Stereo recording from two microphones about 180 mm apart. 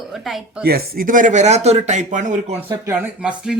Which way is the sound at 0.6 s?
60° right (ahead or behind).